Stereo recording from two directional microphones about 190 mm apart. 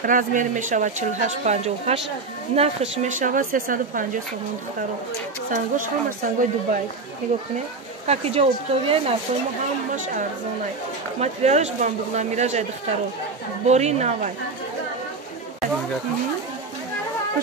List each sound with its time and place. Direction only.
0.0 s a woman's voice: 45° right (ahead or behind)
5.5 s a woman's voice: 45° right (ahead or behind)
8.1 s a woman's voice: 30° right (ahead or behind)
9.9 s a woman's voice: 45° right (ahead or behind)
13.7 s a woman's voice: 35° right (ahead or behind)